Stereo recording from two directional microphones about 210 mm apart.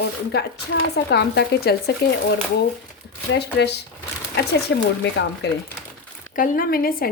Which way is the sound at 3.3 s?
55° left (ahead or behind).